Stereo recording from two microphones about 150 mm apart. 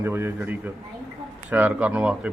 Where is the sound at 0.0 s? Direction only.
15° right (ahead or behind).